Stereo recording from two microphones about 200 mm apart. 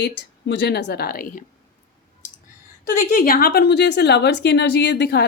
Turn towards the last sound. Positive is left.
turn(degrees=55)  # may be behind; listen again after turning